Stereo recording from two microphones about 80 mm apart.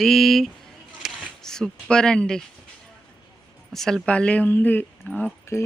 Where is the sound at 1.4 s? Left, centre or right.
Centre.